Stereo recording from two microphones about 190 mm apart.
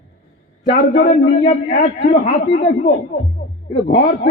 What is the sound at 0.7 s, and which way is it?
A man's voice, 50° left (ahead or behind).